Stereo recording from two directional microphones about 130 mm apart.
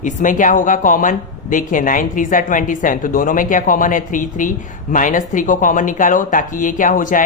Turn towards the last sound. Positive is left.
turn(degrees=90)